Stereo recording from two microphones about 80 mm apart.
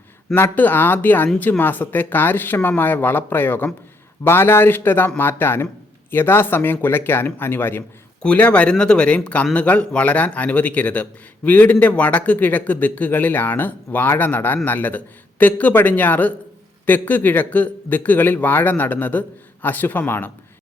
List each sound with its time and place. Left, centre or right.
0.3 s speech: left
8.2 s speech: centre